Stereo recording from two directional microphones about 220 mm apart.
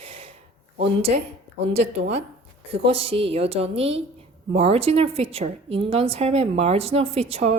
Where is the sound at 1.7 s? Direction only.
30° right (ahead or behind).